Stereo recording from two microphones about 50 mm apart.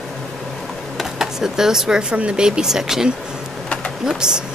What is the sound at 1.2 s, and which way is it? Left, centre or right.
Speech, centre.